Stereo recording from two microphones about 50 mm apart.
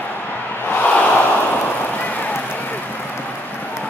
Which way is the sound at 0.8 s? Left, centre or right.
Left.